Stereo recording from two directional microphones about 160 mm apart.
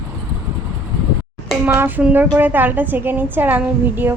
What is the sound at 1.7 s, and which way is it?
A woman's voice, 10° right (ahead or behind).